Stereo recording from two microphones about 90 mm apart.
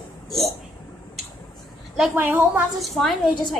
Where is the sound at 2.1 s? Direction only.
20° right (ahead or behind).